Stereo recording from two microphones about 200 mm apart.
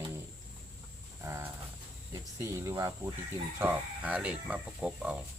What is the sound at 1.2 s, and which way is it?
Speech, 15° right (ahead or behind).